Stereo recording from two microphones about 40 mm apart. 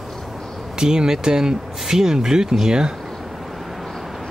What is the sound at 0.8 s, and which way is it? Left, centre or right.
Speech, centre.